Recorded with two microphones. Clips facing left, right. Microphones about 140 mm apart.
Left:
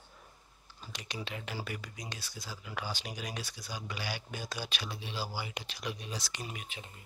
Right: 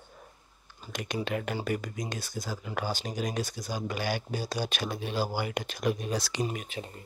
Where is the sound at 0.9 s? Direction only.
50° right (ahead or behind).